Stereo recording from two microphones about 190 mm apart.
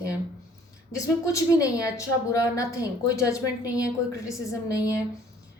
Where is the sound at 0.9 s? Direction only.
20° left (ahead or behind).